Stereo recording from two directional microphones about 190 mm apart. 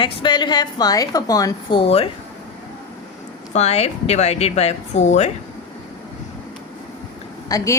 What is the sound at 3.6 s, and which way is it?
Speech, 35° left (ahead or behind).